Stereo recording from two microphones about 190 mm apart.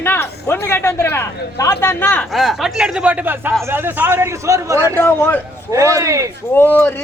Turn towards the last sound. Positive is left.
turn(degrees=10)  # may be behind; listen again after turning